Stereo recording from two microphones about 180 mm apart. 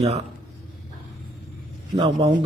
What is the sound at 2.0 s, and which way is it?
Speech, 25° right (ahead or behind).